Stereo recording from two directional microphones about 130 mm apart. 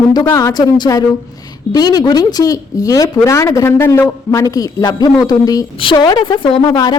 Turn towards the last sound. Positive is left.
turn(degrees=30)  # may be behind; listen again after turning